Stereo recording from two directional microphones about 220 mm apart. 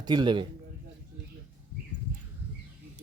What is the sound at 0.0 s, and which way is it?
Speech, 20° right (ahead or behind).